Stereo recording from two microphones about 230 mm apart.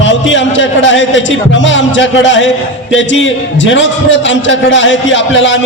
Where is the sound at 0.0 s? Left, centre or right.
Left.